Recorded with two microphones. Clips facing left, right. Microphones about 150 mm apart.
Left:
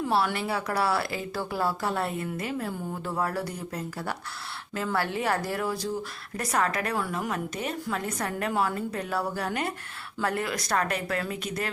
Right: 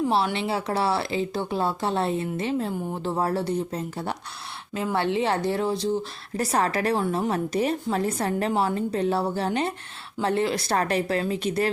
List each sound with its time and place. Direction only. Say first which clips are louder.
0.1 s a woman's voice: right 2 dB; 25° right (ahead or behind)